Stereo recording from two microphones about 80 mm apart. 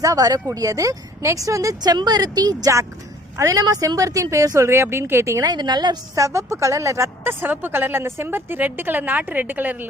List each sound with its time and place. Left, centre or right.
0.0 s a woman's voice: right
5.4 s a woman's voice: right
6.1 s a woman's voice: right
7.4 s a woman's voice: right